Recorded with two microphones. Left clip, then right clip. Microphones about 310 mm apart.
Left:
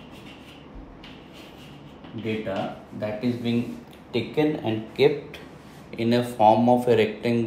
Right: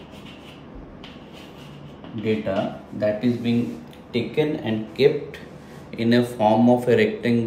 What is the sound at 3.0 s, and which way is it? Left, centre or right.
Speech, centre.